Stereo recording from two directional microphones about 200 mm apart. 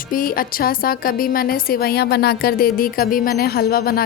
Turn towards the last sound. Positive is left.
turn(degrees=45)  # may be behind; listen again after turning